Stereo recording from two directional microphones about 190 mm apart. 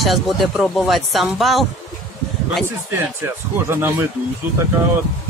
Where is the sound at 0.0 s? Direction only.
Centre (ahead or behind).